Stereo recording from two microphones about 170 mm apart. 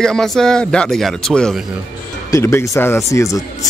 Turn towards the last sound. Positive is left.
turn(degrees=20)  # may be behind; listen again after turning